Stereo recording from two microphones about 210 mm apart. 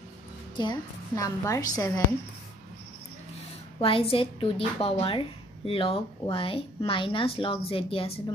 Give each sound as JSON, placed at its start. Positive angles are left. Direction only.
{"t": 0.6, "sound": "a woman's voice", "side_deg": 20}
{"t": 3.8, "sound": "speech", "side_deg": 25}